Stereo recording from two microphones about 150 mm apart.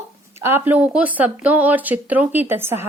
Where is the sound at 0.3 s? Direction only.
15° right (ahead or behind).